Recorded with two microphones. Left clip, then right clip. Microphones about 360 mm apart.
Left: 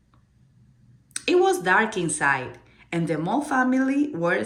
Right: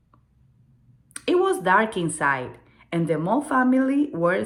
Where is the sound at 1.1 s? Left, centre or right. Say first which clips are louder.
Left 1 dB; centre.